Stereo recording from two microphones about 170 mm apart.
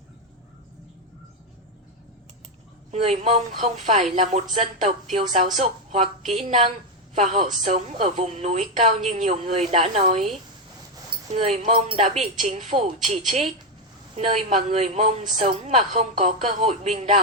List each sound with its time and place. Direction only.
2.9 s a woman's voice: 35° right (ahead or behind)
11.1 s a sound: 35° right (ahead or behind)
11.7 s speech: 35° right (ahead or behind)